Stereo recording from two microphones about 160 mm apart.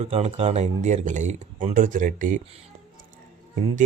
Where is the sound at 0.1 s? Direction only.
45° right (ahead or behind).